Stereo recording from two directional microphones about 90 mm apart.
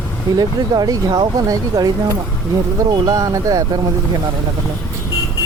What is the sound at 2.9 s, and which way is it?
Speech, 40° right (ahead or behind).